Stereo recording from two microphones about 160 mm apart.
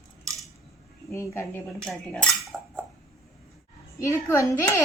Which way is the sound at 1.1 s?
15° left (ahead or behind).